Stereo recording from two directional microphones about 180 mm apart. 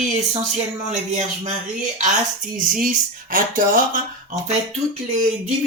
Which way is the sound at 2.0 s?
50° right (ahead or behind).